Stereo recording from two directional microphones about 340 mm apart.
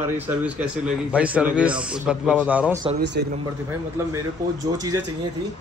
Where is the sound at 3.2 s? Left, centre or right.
Right.